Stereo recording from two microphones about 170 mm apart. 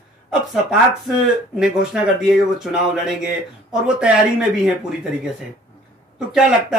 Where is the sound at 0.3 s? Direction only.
Centre (ahead or behind).